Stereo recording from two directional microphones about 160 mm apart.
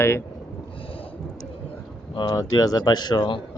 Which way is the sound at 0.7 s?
35° left (ahead or behind).